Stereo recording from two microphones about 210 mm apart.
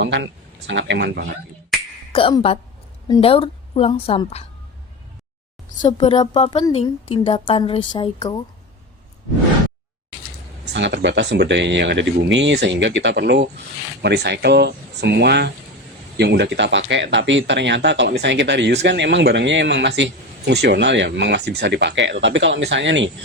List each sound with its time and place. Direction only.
0.0 s speech: 55° right (ahead or behind)
2.1 s a woman's voice: 25° left (ahead or behind)
5.8 s a woman's voice: 25° left (ahead or behind)
10.7 s speech: 55° right (ahead or behind)